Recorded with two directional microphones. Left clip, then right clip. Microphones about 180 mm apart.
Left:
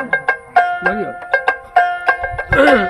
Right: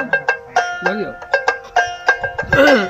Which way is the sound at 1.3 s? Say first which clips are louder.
Left 2 dB; 50° left (ahead or behind).